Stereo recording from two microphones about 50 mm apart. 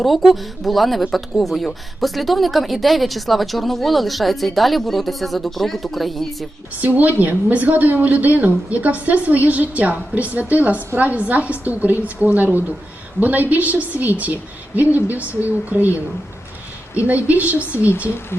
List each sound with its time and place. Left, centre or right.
0.0 s speech: centre
6.8 s a woman's voice: right